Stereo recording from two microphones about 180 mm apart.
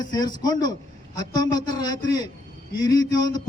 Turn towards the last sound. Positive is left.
turn(degrees=20)  # may be behind; listen again after turning